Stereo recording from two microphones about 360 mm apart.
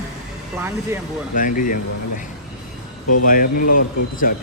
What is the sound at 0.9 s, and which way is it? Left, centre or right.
Speech, centre.